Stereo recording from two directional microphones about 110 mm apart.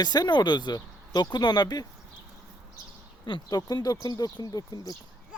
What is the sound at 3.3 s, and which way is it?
Speech, 40° left (ahead or behind).